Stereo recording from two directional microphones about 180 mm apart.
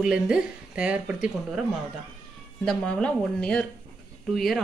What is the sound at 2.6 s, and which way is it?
Speech, 5° left (ahead or behind).